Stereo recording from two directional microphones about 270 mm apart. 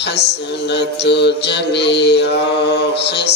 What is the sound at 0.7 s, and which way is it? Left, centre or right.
Mantra, left.